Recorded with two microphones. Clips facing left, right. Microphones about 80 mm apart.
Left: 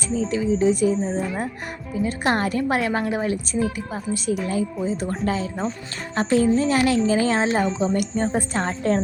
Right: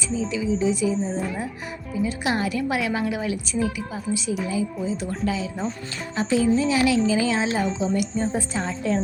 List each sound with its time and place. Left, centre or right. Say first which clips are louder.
0.1 s speech: left 3 dB; left
2.0 s a woman's voice: left 3 dB; left